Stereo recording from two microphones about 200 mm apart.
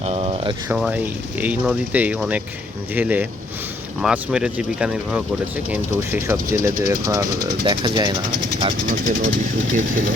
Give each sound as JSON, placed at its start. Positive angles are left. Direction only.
{"t": 0.0, "sound": "a sound", "side_deg": -30}
{"t": 0.7, "sound": "speech", "side_deg": -5}
{"t": 9.7, "sound": "speech", "side_deg": -40}